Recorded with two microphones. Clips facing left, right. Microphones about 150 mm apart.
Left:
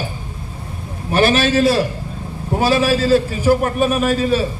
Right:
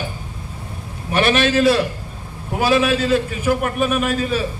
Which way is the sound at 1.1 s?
30° left (ahead or behind).